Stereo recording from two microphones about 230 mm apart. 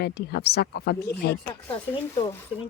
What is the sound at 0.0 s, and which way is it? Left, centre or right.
Speech, left.